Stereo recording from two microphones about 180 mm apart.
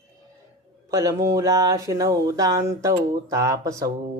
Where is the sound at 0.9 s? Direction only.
20° right (ahead or behind).